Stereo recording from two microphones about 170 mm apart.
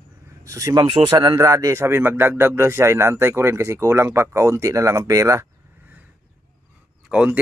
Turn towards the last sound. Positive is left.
turn(degrees=-5)  # may be behind; listen again after turning